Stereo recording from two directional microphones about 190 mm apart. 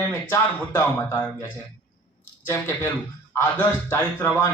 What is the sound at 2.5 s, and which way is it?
Speech, 10° left (ahead or behind).